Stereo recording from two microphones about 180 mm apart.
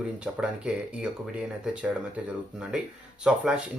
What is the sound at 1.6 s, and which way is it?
Speech, 5° right (ahead or behind).